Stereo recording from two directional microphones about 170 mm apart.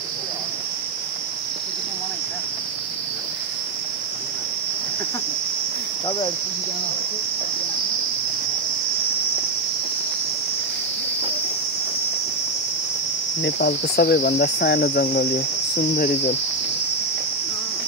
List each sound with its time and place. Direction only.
13.4 s cricket: 70° left (ahead or behind)
15.9 s cricket: 45° left (ahead or behind)